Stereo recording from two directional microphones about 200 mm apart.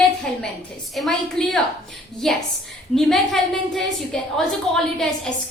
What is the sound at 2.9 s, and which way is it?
A woman's voice, centre (ahead or behind).